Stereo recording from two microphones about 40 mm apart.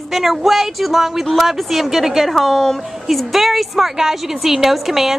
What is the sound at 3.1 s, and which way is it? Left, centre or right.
A woman's voice, centre.